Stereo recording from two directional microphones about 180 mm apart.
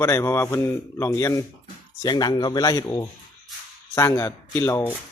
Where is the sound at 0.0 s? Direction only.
15° left (ahead or behind).